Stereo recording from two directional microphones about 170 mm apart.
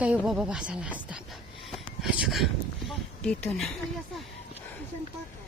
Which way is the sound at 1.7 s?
Centre (ahead or behind).